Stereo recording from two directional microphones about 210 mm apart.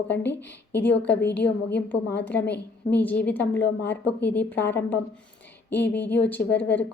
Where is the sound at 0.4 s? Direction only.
10° left (ahead or behind).